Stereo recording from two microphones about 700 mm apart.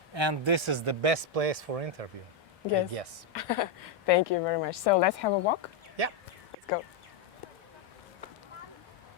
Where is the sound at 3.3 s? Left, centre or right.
Left.